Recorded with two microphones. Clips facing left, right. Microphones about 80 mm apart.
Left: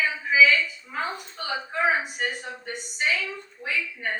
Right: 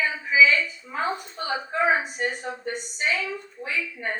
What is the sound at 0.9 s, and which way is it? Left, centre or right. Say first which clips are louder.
Speech: right 3 dB; right.